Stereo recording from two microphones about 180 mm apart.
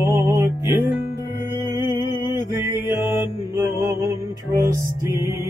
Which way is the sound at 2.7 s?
15° right (ahead or behind).